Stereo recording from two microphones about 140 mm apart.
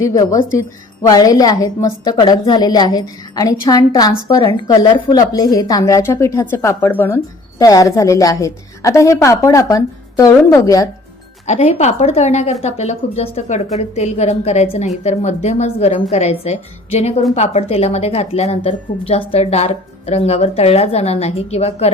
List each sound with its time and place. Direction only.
0.0 s a woman's voice: 25° left (ahead or behind)
11.4 s a woman's voice: 50° left (ahead or behind)